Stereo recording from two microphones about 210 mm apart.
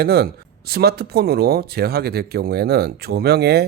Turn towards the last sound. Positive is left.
turn(degrees=-50)  # may be behind; listen again after turning